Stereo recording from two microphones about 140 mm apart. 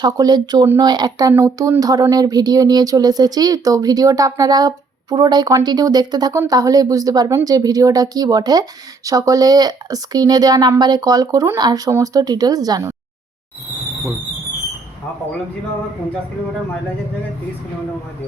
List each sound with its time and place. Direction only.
0.0 s speech: 30° right (ahead or behind)